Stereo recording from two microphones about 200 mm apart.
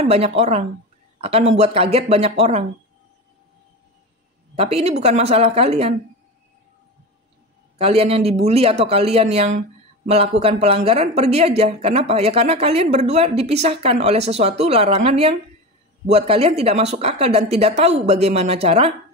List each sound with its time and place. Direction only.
0.0 s a man's voice: 30° right (ahead or behind)
4.6 s speech: 30° right (ahead or behind)
7.7 s speech: 30° right (ahead or behind)